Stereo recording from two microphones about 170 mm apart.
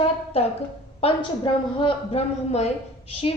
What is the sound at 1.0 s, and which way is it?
A woman's voice, 30° left (ahead or behind).